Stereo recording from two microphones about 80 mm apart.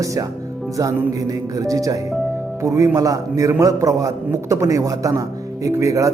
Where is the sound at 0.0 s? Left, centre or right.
Right.